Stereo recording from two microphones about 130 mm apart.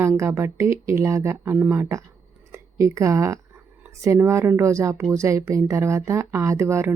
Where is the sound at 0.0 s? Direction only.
20° right (ahead or behind).